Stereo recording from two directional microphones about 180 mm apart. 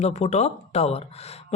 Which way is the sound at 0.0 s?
40° left (ahead or behind).